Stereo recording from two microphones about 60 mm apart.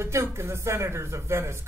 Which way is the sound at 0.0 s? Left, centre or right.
Right.